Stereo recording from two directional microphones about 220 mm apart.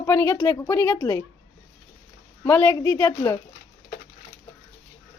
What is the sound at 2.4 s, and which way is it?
Speech, 10° left (ahead or behind).